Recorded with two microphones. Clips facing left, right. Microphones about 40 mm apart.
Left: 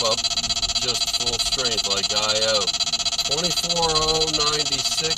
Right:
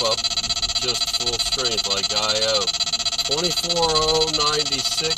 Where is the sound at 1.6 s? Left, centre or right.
Centre.